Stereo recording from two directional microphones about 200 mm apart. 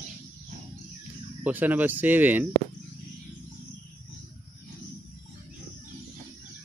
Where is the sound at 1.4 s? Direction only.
10° right (ahead or behind).